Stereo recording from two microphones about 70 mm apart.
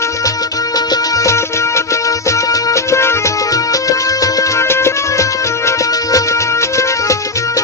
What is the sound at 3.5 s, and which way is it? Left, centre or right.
Music, left.